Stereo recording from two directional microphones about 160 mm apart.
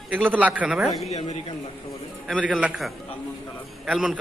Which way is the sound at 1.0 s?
45° left (ahead or behind).